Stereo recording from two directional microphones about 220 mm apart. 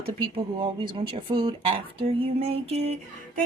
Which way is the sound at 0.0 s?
20° right (ahead or behind).